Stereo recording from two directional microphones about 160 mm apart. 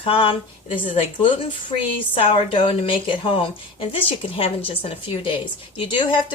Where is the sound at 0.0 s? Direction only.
35° left (ahead or behind).